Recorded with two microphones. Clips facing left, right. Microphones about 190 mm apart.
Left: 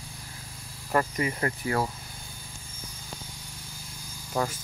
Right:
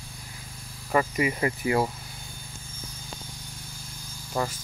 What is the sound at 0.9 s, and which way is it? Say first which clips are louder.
Speech: right 2 dB; 10° right (ahead or behind).